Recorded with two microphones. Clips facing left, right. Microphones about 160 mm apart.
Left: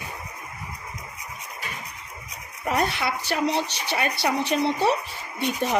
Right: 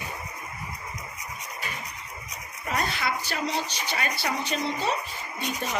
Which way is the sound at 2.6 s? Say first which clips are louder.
Left 4 dB; 65° left (ahead or behind).